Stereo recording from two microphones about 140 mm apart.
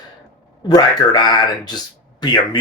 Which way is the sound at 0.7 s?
30° left (ahead or behind).